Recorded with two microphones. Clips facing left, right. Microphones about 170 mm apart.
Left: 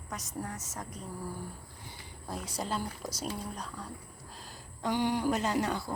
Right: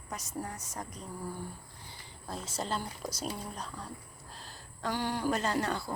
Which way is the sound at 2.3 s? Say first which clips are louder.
Even; 15° left (ahead or behind).